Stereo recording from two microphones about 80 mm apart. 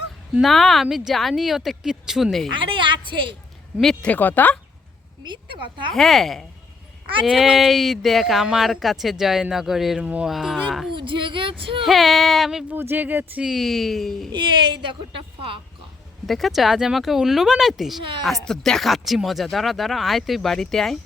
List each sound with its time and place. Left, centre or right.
0.4 s speech: centre
2.6 s a sound: right
3.8 s speech: centre
4.1 s speech: left
5.2 s a woman's voice: right
5.9 s speech: centre
10.9 s speech: right
11.8 s speech: centre
12.7 s speech: right
13.4 s speech: centre
14.3 s speech: right
16.2 s speech: centre